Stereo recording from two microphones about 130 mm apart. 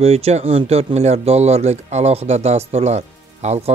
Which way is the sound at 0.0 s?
55° right (ahead or behind).